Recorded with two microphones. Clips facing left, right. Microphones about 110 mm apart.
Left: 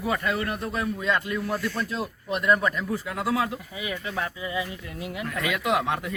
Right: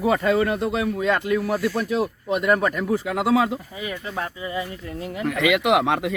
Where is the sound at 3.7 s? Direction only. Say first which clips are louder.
Right 2 dB; 35° right (ahead or behind).